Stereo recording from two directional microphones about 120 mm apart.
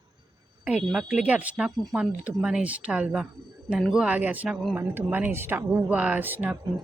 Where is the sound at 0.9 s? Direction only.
5° right (ahead or behind).